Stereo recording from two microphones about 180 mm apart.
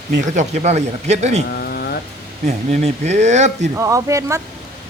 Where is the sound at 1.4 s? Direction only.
60° left (ahead or behind).